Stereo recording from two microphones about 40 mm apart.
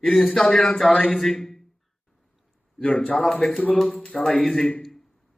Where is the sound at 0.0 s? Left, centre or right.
Centre.